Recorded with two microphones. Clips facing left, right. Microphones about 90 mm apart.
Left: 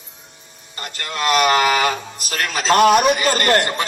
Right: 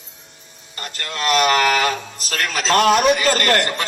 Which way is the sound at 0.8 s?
20° left (ahead or behind).